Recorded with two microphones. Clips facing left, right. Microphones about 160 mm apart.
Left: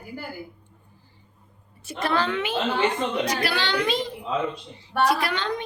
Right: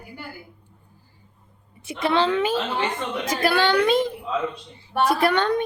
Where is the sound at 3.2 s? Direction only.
50° right (ahead or behind).